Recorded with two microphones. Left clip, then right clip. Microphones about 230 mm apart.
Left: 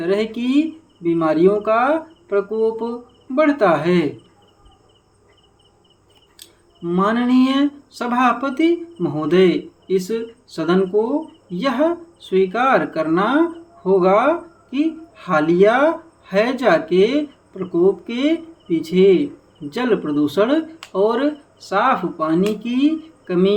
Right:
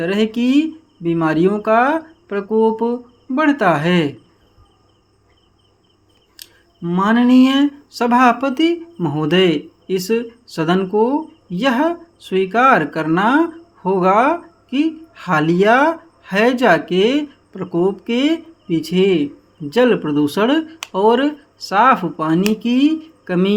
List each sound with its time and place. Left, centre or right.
0.0 s speech: right
6.3 s speech: right